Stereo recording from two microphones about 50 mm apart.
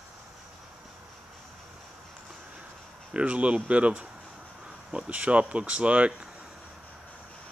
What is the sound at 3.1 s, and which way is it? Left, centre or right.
Speech, right.